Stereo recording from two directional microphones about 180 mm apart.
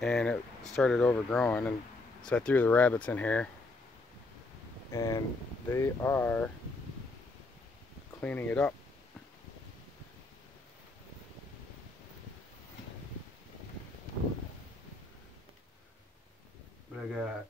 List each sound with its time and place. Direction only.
0.0 s speech: 5° left (ahead or behind)
4.9 s speech: 20° left (ahead or behind)
8.2 s speech: 10° left (ahead or behind)
16.9 s speech: 5° right (ahead or behind)